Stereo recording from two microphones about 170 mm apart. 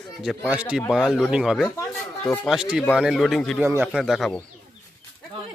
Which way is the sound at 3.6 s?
10° right (ahead or behind).